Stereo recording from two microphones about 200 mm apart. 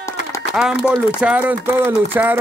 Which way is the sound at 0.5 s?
5° right (ahead or behind).